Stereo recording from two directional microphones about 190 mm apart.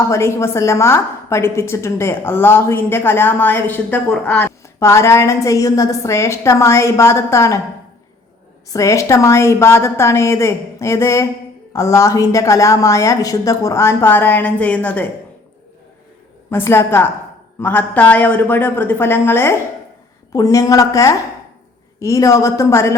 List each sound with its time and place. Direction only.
0.0 s a woman's voice: 15° left (ahead or behind)
8.7 s a woman's voice: 15° left (ahead or behind)
16.5 s a woman's voice: 10° left (ahead or behind)